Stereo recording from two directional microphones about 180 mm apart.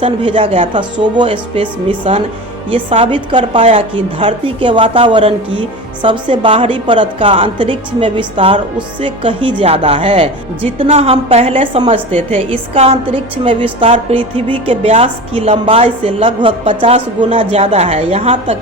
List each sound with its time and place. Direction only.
0.0 s a woman's voice: 30° right (ahead or behind)